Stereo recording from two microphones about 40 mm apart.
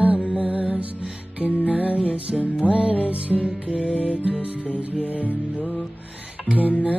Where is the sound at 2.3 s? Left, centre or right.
Centre.